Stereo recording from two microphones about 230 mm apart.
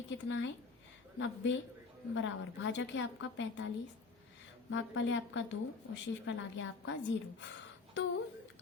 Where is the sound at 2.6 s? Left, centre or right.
Left.